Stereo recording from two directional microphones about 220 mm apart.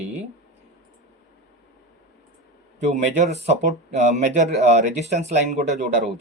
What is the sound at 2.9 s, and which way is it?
Speech, 30° right (ahead or behind).